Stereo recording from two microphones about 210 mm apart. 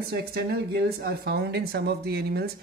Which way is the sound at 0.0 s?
50° right (ahead or behind).